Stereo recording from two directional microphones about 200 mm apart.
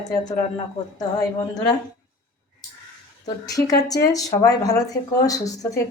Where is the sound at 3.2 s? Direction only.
20° left (ahead or behind).